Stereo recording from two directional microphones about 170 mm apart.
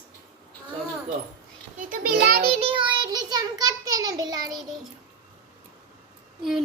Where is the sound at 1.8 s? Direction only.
55° right (ahead or behind).